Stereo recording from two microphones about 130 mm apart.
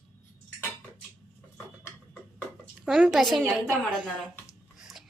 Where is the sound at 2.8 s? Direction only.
5° right (ahead or behind).